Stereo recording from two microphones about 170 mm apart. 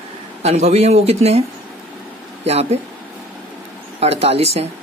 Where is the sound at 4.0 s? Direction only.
35° right (ahead or behind).